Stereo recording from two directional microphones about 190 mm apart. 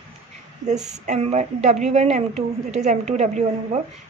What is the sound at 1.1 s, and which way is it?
A woman's voice, 35° right (ahead or behind).